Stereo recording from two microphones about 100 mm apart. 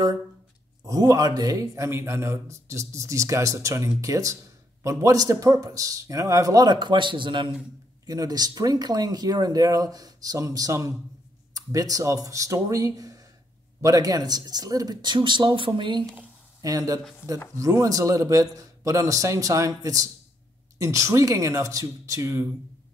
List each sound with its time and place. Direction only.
0.8 s speech: 35° right (ahead or behind); by 7.5 s 55° right (ahead or behind)
8.1 s speech: 40° right (ahead or behind)
16.6 s speech: 35° right (ahead or behind)